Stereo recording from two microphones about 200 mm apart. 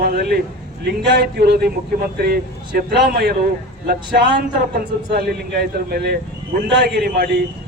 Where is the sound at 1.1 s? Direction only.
55° right (ahead or behind).